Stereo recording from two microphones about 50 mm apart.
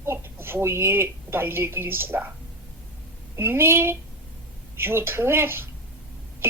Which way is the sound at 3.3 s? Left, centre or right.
Right.